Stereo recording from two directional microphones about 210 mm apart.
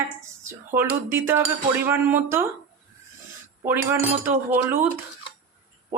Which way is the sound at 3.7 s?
10° right (ahead or behind).